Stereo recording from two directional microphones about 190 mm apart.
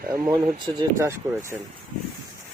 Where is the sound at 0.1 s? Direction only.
20° right (ahead or behind).